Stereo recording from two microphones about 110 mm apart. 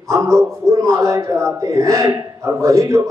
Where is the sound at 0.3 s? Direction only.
25° right (ahead or behind).